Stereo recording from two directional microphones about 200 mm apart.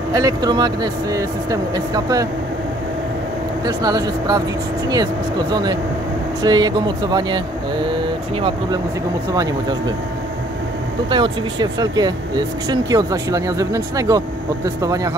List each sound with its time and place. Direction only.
0.1 s speech: 20° right (ahead or behind)
3.6 s speech: 20° right (ahead or behind)
9.3 s speech: 20° right (ahead or behind)
11.1 s speech: 25° right (ahead or behind)